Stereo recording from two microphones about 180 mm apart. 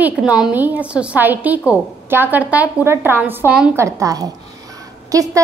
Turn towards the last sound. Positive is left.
turn(degrees=-20)  # may be behind; listen again after turning